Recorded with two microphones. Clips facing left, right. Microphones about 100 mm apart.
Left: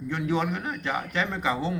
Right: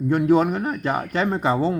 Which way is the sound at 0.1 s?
40° right (ahead or behind).